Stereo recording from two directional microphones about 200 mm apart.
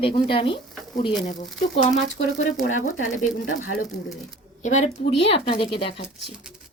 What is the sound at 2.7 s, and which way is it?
Speech, 90° left.